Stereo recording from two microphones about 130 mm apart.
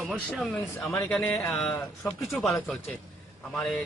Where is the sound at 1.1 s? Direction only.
5° left (ahead or behind).